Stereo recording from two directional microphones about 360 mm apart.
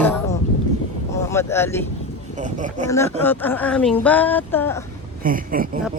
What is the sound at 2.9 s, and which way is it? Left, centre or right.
Speech, centre.